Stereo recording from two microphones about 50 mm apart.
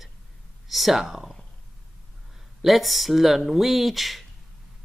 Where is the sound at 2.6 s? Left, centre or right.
Centre.